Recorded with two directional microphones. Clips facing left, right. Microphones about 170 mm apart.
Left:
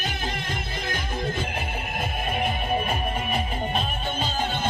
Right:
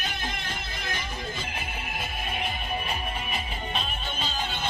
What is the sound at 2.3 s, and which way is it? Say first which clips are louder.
Music: left 7 dB; 50° left (ahead or behind).